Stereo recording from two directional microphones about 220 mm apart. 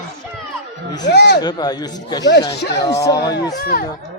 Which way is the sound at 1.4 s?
20° left (ahead or behind).